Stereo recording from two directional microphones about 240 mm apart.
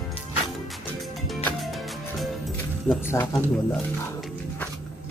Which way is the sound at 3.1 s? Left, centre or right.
Centre.